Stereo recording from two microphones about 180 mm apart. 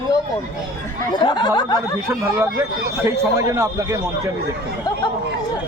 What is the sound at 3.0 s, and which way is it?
Speech, 15° right (ahead or behind).